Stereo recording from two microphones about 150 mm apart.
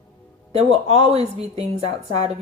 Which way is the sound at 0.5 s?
45° right (ahead or behind).